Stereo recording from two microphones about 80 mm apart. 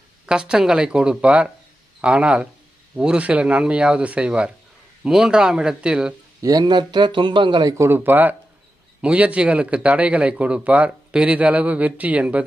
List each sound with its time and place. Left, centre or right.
0.3 s a man's voice: centre
6.4 s speech: right
6.7 s speech: right
7.8 s a man's voice: right